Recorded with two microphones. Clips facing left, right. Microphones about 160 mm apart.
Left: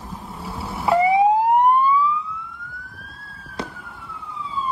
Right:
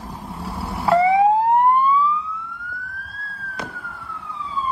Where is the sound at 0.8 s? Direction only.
15° left (ahead or behind).